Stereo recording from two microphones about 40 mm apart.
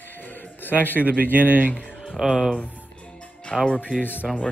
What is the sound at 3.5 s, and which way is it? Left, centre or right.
Speech, centre.